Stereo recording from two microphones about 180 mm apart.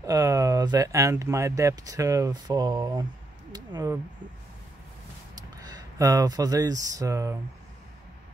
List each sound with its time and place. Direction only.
0.0 s speech: 20° right (ahead or behind)
3.5 s a sound: 20° right (ahead or behind)
5.3 s speech: 20° right (ahead or behind)